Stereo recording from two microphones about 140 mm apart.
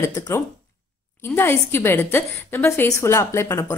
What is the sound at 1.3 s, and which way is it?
A woman's voice, 15° left (ahead or behind).